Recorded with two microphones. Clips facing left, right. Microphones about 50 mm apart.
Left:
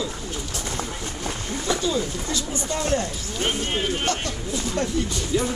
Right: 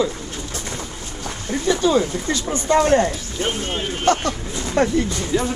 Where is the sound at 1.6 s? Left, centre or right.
Right.